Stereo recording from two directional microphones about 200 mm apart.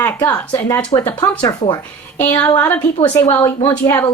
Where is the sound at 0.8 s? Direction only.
20° left (ahead or behind).